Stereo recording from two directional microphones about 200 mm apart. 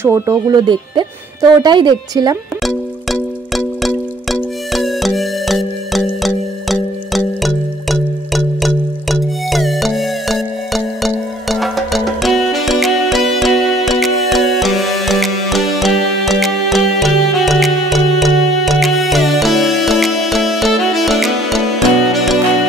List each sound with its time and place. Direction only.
0.0 s speech: 15° right (ahead or behind)
2.6 s music: centre (ahead or behind)